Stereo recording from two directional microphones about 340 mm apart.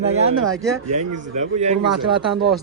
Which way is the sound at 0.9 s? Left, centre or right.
Right.